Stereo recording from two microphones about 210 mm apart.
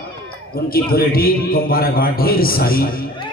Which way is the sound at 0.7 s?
45° left (ahead or behind).